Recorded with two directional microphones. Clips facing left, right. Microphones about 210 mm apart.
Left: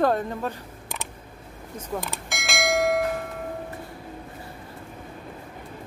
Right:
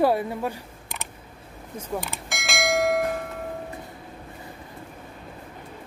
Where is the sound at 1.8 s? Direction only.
Centre (ahead or behind).